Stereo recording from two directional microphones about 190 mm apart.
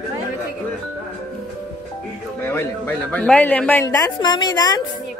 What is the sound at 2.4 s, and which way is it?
A man's voice, 10° left (ahead or behind).